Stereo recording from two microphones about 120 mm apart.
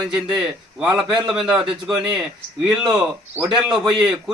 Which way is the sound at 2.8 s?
30° right (ahead or behind).